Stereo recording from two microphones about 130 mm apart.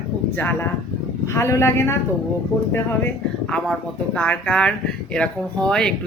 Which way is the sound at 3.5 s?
5° left (ahead or behind).